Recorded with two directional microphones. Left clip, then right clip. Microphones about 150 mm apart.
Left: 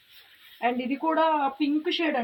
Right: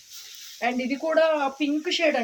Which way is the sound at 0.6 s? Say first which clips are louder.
Even; 40° right (ahead or behind).